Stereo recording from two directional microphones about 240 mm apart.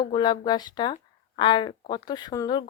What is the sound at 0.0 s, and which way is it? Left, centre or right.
Speech, centre.